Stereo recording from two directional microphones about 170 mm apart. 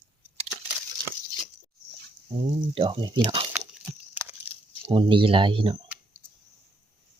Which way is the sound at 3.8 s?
10° right (ahead or behind).